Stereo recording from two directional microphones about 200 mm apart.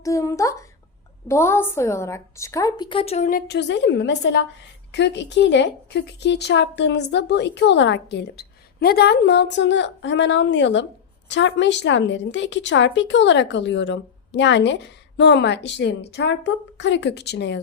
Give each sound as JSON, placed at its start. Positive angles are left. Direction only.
{"t": 0.0, "sound": "a woman's voice", "side_deg": 15}
{"t": 3.2, "sound": "speech", "side_deg": 50}